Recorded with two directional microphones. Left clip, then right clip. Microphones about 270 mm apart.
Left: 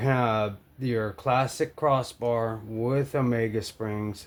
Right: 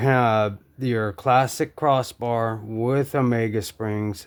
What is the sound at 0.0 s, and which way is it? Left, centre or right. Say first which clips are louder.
Speech: right 6 dB; right.